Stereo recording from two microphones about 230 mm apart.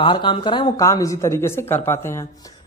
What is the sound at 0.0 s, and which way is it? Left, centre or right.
A man's voice, left.